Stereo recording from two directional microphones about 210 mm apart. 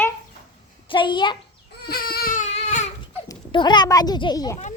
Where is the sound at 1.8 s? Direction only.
45° left (ahead or behind).